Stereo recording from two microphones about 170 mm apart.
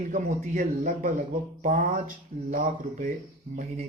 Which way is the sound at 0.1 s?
50° right (ahead or behind).